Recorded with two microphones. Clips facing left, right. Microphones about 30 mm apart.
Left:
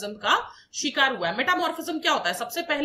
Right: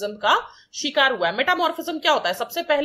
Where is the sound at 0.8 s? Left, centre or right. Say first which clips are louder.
Right 2 dB; right.